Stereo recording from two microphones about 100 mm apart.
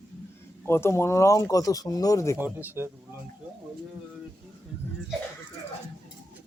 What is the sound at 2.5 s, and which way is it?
Speech, 20° right (ahead or behind).